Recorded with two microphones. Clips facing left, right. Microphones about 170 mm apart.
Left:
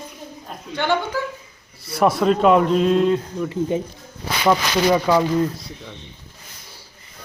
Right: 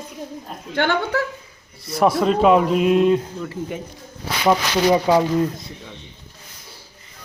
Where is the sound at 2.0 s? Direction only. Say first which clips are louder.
Even; centre (ahead or behind); by 3.2 s 15° right (ahead or behind).